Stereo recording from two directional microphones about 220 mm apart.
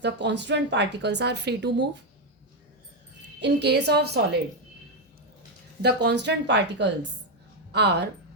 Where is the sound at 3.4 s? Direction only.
50° right (ahead or behind).